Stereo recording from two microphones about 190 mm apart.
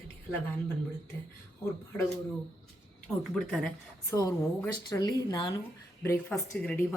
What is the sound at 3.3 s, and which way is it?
Speech, centre (ahead or behind).